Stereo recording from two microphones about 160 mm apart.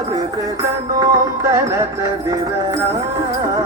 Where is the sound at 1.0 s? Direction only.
20° right (ahead or behind).